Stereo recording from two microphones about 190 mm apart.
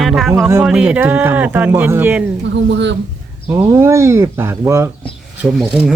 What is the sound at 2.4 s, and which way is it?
Speech, 70° right (ahead or behind).